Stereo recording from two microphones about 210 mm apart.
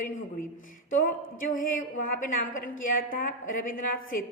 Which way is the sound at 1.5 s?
40° left (ahead or behind).